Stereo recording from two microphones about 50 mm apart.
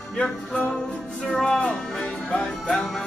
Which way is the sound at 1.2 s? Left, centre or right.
Centre.